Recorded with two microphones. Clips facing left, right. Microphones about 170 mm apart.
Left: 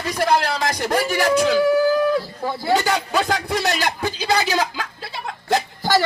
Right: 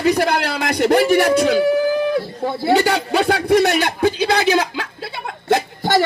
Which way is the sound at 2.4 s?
60° right (ahead or behind).